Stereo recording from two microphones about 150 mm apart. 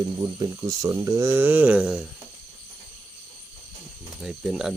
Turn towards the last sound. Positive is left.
turn(degrees=-5)  # may be behind; listen again after turning